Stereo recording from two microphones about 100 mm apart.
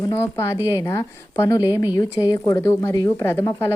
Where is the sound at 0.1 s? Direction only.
25° left (ahead or behind).